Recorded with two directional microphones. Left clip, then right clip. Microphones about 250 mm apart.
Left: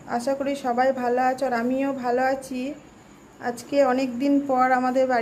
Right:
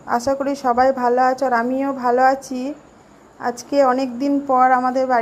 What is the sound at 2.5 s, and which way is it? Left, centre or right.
Speech, right.